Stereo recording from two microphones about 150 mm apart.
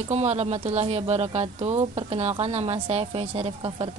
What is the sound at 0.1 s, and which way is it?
Speech, 45° right (ahead or behind).